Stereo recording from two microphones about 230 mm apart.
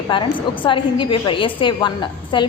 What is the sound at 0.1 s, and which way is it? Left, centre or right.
A woman's voice, left.